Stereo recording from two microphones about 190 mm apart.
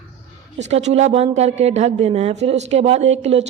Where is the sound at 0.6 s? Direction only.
35° right (ahead or behind).